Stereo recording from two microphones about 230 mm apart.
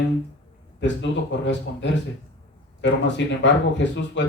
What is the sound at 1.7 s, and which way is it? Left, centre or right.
Speech, left.